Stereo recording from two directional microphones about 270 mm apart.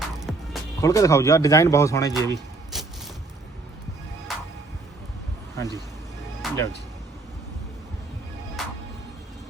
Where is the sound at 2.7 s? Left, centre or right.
Centre.